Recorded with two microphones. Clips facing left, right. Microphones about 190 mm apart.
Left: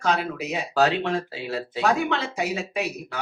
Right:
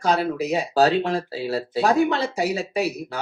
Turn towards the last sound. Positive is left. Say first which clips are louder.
# right 4 dB
turn(degrees=-35)  # may be behind; listen again after turning